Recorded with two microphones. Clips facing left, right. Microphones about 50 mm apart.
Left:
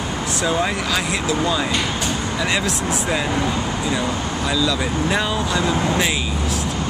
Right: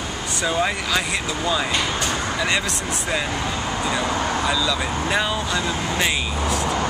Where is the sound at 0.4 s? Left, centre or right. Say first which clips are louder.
Left 1 dB; centre.